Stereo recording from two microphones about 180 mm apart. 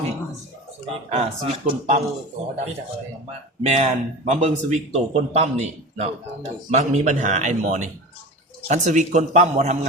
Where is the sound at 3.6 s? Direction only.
35° right (ahead or behind).